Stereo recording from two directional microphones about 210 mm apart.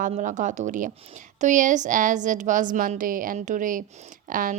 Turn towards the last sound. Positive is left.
turn(degrees=-40)  # may be behind; listen again after turning